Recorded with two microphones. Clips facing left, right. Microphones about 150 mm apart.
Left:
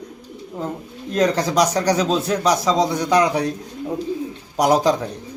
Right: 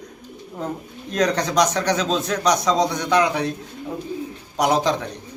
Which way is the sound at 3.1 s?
35° left (ahead or behind).